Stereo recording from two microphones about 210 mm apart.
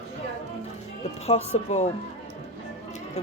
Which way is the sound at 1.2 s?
30° left (ahead or behind).